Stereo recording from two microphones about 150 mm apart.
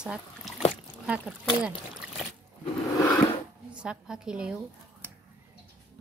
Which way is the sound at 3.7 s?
5° right (ahead or behind).